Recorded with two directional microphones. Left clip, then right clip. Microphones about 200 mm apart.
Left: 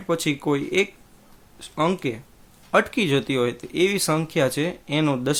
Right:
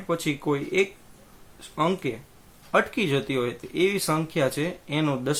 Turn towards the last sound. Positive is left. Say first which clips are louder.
# left 3 dB
turn(degrees=45)  # may be behind; listen again after turning